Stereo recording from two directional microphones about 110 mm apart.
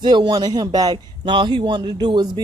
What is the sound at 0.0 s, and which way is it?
A man's voice, 40° right (ahead or behind).